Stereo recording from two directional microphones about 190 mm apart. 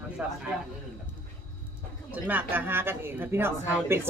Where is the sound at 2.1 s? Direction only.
10° right (ahead or behind).